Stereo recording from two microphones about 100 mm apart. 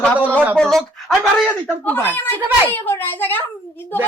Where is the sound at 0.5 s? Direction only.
5° left (ahead or behind).